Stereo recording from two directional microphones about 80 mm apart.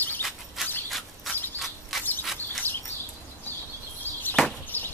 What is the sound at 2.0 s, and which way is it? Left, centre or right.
Bird, left.